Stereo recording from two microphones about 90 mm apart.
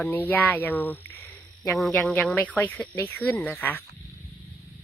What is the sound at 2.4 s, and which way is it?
Speech, 15° left (ahead or behind).